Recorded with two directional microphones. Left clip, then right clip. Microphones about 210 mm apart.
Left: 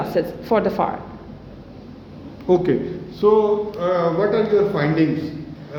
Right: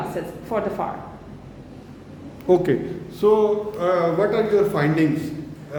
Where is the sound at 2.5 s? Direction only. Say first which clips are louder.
Left 1 dB; 15° right (ahead or behind).